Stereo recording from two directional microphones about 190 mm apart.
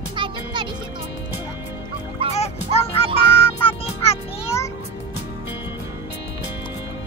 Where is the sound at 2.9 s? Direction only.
30° left (ahead or behind).